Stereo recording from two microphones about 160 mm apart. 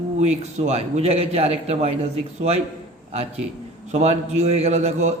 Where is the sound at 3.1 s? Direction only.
40° right (ahead or behind).